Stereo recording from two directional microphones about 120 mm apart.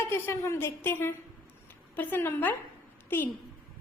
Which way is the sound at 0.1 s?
20° left (ahead or behind).